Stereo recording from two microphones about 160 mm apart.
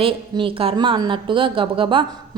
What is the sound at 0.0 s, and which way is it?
A woman's voice, 35° right (ahead or behind).